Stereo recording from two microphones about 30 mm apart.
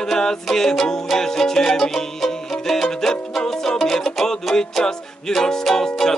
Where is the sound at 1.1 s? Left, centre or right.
Centre.